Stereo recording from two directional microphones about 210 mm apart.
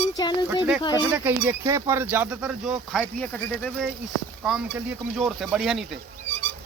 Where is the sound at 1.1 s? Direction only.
10° right (ahead or behind).